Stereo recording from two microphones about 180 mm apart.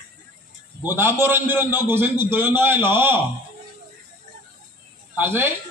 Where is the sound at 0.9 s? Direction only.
10° right (ahead or behind).